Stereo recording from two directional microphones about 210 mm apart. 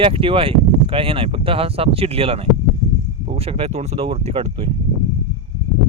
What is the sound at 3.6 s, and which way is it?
Speech, 30° right (ahead or behind).